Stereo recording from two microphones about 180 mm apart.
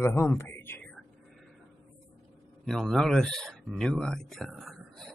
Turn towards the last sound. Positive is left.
turn(degrees=0)  # may be behind; listen again after turning